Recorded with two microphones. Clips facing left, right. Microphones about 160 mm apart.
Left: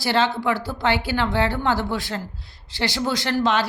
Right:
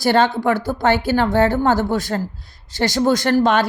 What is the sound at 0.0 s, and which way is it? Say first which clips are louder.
Speech: right 5 dB; 50° right (ahead or behind).